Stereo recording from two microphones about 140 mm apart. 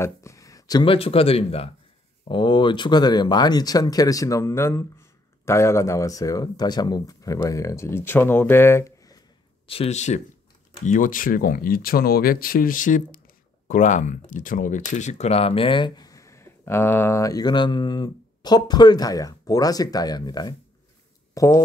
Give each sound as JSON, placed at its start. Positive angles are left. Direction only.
{"t": 0.0, "sound": "a sound", "side_deg": 20}
{"t": 0.8, "sound": "speech", "side_deg": 45}
{"t": 9.7, "sound": "speech", "side_deg": 50}
{"t": 10.9, "sound": "speech", "side_deg": 75}